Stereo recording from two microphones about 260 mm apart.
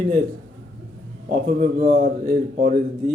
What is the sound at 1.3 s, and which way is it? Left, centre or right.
A man's voice, right.